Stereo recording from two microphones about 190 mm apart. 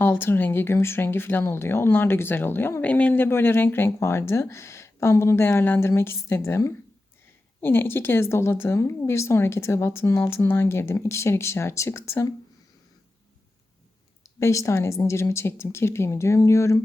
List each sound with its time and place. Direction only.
0.0 s speech: 10° left (ahead or behind)
14.3 s speech: 15° left (ahead or behind)